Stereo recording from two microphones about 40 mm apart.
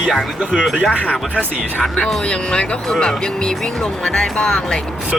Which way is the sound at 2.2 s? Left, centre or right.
Left.